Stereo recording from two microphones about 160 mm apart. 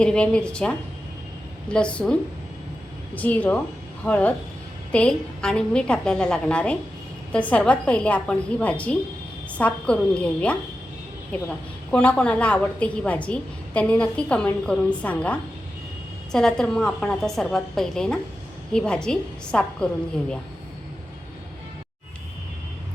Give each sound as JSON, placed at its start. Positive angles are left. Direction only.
{"t": 0.0, "sound": "a woman's voice", "side_deg": 5}
{"t": 3.2, "sound": "a woman's voice", "side_deg": 10}